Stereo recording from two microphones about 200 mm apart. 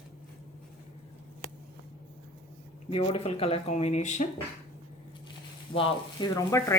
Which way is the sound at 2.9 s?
30° left (ahead or behind).